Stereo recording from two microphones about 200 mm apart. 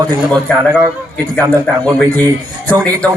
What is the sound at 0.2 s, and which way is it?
A man's voice, 5° left (ahead or behind).